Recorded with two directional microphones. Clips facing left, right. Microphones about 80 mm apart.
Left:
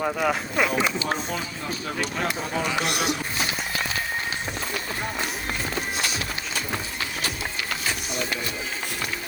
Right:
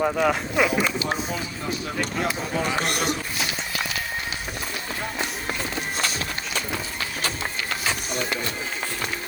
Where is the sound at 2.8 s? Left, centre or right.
Right.